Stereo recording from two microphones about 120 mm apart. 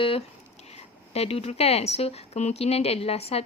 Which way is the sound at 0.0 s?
50° left (ahead or behind).